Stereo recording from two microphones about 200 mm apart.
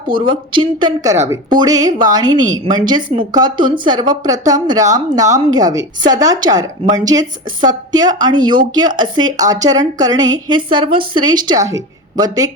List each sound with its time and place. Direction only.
0.1 s a woman's voice: 25° right (ahead or behind)